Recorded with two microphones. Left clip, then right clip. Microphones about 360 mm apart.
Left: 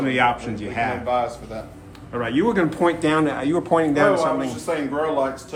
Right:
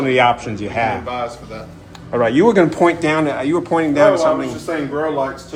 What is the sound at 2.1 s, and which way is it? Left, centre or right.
Speech, centre.